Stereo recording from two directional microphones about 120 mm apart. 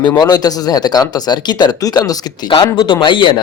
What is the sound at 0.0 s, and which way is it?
Speech, 35° left (ahead or behind).